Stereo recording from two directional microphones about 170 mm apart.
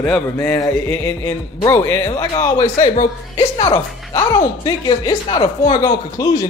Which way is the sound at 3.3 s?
25° left (ahead or behind).